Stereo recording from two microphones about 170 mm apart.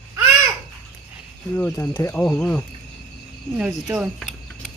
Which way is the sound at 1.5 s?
10° left (ahead or behind).